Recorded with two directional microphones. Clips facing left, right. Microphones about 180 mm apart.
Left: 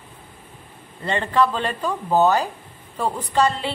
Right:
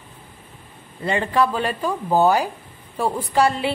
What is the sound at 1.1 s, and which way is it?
A woman's voice, 10° right (ahead or behind).